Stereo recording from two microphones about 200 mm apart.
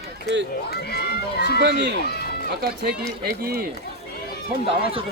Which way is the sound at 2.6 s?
55° right (ahead or behind).